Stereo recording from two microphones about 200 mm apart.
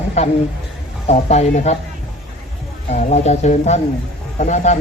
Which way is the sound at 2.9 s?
35° left (ahead or behind).